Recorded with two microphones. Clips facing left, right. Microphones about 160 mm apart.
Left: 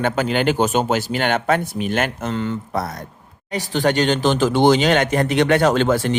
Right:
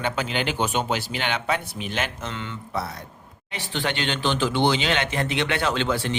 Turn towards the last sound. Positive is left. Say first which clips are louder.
# left 7 dB
turn(degrees=45)  # may be behind; listen again after turning